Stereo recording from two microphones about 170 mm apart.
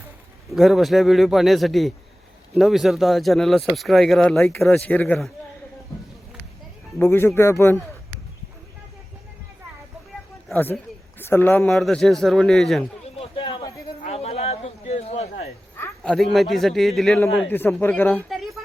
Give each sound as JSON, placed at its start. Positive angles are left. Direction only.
{"t": 0.5, "sound": "a man's voice", "side_deg": 0}
{"t": 7.0, "sound": "speech", "side_deg": 15}
{"t": 10.5, "sound": "a man's voice", "side_deg": 10}
{"t": 13.1, "sound": "a sound", "side_deg": 30}
{"t": 14.0, "sound": "a sound", "side_deg": 35}
{"t": 15.8, "sound": "a man's voice", "side_deg": 5}
{"t": 18.3, "sound": "music", "side_deg": 0}